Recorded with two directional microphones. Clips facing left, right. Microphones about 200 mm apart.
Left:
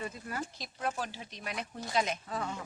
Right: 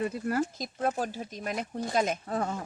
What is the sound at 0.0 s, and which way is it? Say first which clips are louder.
Speech: right 10 dB; 55° right (ahead or behind).